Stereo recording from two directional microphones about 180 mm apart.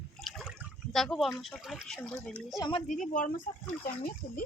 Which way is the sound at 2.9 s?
45° left (ahead or behind).